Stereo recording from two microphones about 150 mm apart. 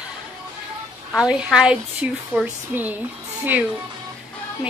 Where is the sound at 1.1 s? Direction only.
5° right (ahead or behind).